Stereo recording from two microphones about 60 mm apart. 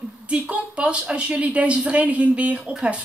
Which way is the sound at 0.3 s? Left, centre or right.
Centre.